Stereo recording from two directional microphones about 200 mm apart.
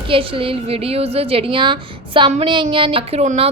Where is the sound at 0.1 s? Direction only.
25° right (ahead or behind).